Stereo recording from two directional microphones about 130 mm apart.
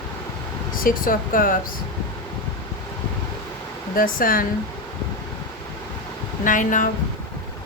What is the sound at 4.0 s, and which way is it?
Speech, 90° left.